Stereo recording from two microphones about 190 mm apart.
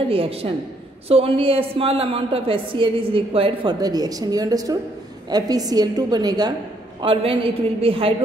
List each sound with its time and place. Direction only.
0.1 s a woman's voice: 30° right (ahead or behind)